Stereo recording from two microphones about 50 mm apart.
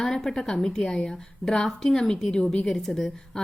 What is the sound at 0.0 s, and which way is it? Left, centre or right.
A woman's voice, centre.